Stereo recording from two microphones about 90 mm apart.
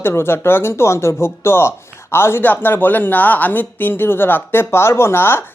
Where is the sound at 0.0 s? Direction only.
25° left (ahead or behind).